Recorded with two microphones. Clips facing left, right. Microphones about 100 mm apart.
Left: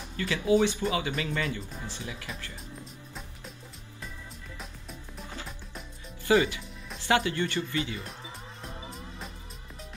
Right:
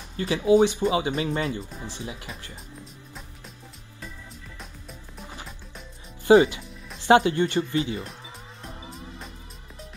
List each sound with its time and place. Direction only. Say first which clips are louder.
0.2 s speech: right 5 dB; 20° right (ahead or behind)
6.2 s speech: right 8 dB; 25° right (ahead or behind)